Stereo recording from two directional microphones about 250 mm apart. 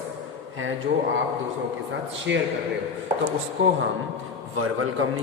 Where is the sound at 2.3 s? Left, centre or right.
Right.